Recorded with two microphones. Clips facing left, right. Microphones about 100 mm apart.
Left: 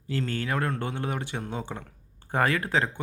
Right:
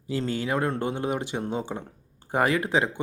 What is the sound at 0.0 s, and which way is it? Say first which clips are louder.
Speech: right 2 dB; 15° right (ahead or behind).